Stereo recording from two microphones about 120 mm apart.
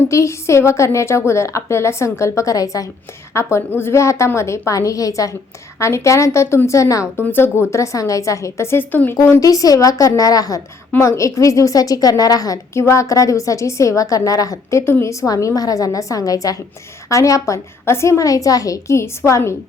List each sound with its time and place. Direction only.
0.1 s a woman's voice: 25° left (ahead or behind)
9.4 s a woman's voice: 30° left (ahead or behind)